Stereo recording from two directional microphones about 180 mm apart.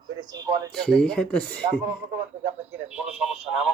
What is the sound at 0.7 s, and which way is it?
Speech, 5° left (ahead or behind).